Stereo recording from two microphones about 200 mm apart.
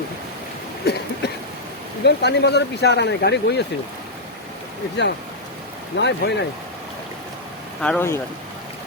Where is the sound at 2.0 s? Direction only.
55° left (ahead or behind).